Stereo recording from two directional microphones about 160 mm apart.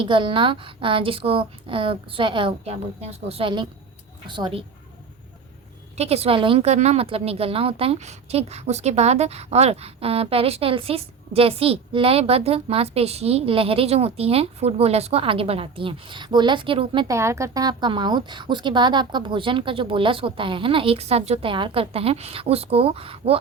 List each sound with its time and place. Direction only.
0.0 s speech: 30° right (ahead or behind)
6.0 s speech: 40° right (ahead or behind)
17.1 s speech: 20° right (ahead or behind); by 23.4 s 35° right (ahead or behind)